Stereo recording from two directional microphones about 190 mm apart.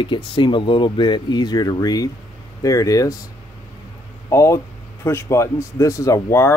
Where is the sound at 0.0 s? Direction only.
25° left (ahead or behind).